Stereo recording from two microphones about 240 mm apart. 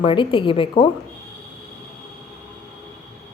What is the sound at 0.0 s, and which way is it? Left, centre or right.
Speech, left.